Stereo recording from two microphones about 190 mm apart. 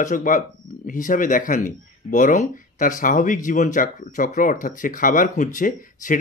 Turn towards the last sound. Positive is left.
turn(degrees=45)  # may be behind; listen again after turning